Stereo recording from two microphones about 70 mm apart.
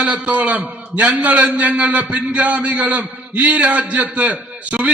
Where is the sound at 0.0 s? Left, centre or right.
Right.